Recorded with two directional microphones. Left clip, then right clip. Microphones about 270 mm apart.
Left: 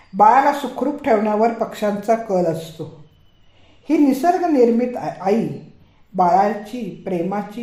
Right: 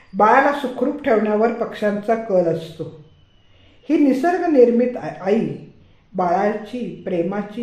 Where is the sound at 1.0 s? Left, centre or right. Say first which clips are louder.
Left 1 dB; left.